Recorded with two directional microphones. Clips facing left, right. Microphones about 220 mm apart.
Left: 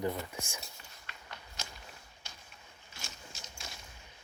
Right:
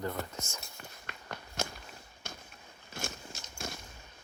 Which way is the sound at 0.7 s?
55° right (ahead or behind).